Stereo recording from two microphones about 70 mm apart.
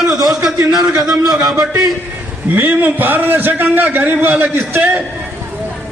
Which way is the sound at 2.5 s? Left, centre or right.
Right.